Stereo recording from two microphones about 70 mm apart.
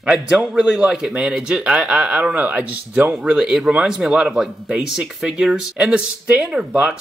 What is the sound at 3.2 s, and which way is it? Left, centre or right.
Speech, centre.